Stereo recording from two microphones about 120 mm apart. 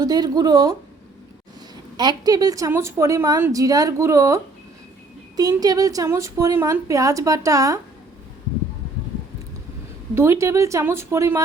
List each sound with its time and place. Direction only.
0.0 s speech: 35° right (ahead or behind)
2.0 s a woman's voice: 35° right (ahead or behind)
5.4 s a woman's voice: 30° right (ahead or behind)
10.2 s a woman's voice: 25° right (ahead or behind)